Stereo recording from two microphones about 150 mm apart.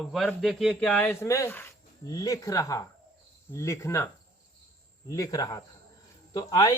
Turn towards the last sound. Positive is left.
turn(degrees=25)  # may be behind; listen again after turning